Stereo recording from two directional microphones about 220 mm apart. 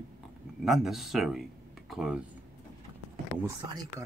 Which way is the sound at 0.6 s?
Centre (ahead or behind).